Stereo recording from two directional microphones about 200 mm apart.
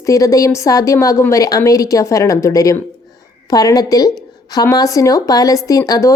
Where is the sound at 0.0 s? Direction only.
15° left (ahead or behind).